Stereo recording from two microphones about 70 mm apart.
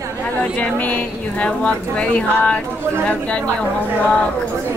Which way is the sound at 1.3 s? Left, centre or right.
Centre.